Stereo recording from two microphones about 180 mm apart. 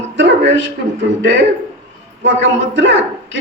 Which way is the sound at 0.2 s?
90° right.